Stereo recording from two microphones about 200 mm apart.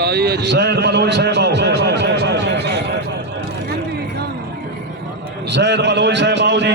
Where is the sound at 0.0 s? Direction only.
55° right (ahead or behind).